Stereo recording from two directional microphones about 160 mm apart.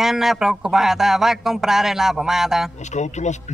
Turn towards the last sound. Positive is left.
turn(degrees=45)  # may be behind; listen again after turning